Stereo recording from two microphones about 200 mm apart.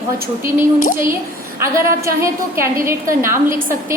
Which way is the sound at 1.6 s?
15° right (ahead or behind).